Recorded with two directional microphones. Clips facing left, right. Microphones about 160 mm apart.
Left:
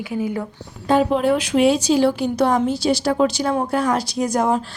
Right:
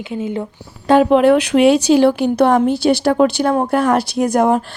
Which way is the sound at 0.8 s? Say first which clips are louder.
Right 6 dB; 70° right (ahead or behind).